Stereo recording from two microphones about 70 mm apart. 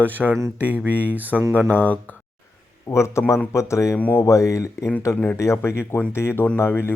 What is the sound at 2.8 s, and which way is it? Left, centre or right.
Speech, left.